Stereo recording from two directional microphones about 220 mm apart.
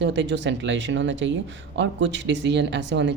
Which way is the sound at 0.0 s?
55° right (ahead or behind).